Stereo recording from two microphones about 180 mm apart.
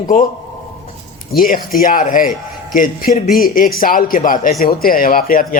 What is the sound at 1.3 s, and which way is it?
A man's voice, 50° left (ahead or behind).